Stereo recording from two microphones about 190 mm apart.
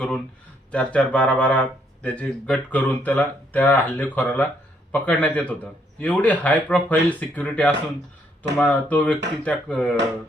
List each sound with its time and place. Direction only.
0.7 s speech: 5° left (ahead or behind)